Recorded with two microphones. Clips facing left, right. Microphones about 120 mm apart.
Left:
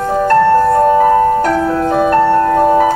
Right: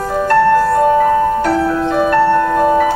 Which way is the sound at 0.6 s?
40° left (ahead or behind).